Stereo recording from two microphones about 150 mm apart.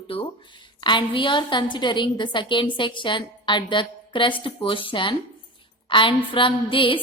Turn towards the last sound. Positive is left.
turn(degrees=35)  # may be behind; listen again after turning